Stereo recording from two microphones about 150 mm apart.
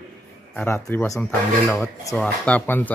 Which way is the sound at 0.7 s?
20° left (ahead or behind).